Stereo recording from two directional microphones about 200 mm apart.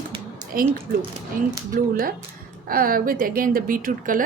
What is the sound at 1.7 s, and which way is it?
A woman's voice, 45° right (ahead or behind).